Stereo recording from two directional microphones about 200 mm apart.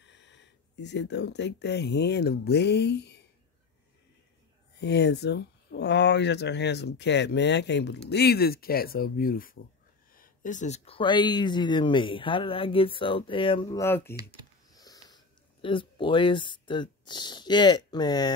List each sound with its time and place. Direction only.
0.0 s speech: 65° left (ahead or behind)
4.7 s speech: 55° left (ahead or behind); by 18.3 s 20° left (ahead or behind)